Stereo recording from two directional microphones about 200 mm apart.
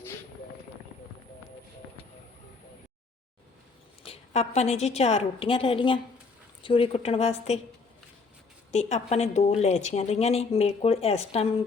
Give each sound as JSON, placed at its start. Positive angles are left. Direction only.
{"t": 4.0, "sound": "a woman's voice", "side_deg": 30}
{"t": 8.7, "sound": "a woman's voice", "side_deg": 35}